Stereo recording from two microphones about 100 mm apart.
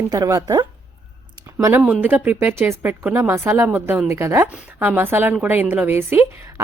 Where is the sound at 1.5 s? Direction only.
25° right (ahead or behind).